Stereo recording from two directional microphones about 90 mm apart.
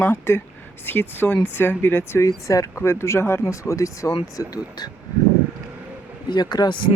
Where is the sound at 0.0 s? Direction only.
25° left (ahead or behind); by 4.9 s 40° left (ahead or behind).